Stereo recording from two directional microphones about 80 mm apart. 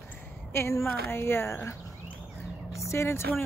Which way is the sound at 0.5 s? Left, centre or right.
Left.